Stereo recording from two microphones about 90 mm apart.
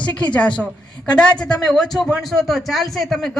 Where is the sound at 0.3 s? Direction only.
15° left (ahead or behind).